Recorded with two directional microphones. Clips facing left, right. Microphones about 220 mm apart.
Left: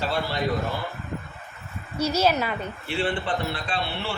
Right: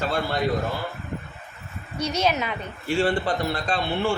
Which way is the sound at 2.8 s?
40° right (ahead or behind).